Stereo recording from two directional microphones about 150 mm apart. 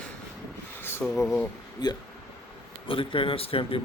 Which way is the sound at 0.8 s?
15° left (ahead or behind).